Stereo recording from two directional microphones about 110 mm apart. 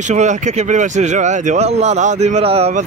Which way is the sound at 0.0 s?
90° right.